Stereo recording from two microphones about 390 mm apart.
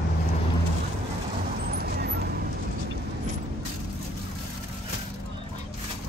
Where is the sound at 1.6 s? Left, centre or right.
Right.